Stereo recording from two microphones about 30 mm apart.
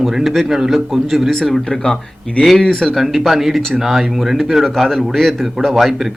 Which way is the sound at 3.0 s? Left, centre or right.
Centre.